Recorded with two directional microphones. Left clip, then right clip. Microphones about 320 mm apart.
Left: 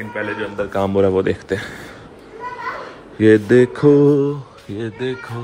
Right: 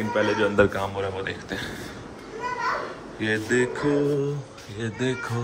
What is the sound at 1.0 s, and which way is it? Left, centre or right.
Speech, centre.